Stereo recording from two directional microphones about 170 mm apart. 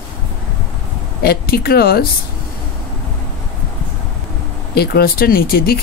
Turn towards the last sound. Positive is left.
turn(degrees=60)  # may be behind; listen again after turning